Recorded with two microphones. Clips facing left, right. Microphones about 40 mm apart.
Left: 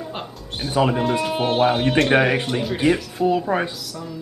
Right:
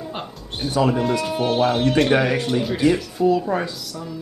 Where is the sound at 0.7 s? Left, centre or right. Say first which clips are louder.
Even; left.